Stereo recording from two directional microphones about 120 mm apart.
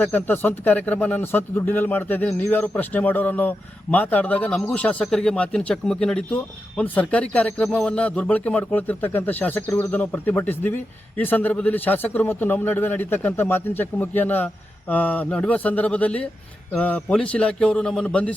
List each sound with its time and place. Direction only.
0.0 s a man's voice: 15° left (ahead or behind)